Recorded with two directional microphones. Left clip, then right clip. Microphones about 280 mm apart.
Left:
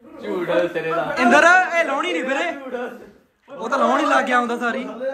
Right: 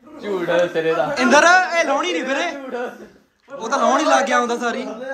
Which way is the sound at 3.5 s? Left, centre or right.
Centre.